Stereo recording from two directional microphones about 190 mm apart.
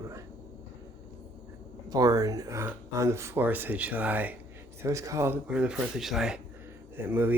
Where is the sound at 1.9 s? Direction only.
20° right (ahead or behind).